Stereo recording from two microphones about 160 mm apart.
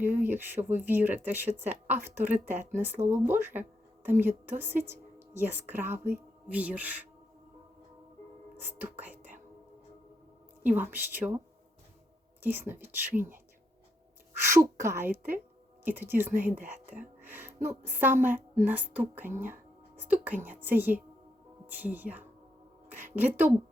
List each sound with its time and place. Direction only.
0.0 s speech: 10° right (ahead or behind)
8.8 s speech: 10° right (ahead or behind)
10.6 s a woman's voice: 10° right (ahead or behind)
11.2 s speech: 20° right (ahead or behind)
12.4 s speech: 15° right (ahead or behind)